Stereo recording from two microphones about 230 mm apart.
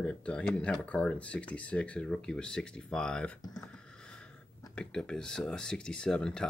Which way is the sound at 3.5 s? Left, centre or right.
Centre.